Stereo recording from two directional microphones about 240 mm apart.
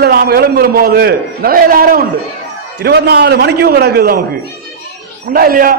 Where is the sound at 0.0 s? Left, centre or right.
Right.